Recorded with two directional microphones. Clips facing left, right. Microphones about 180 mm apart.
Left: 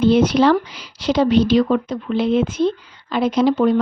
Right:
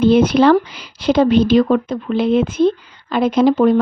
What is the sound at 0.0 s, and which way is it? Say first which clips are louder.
Speech: right 2 dB; 55° right (ahead or behind).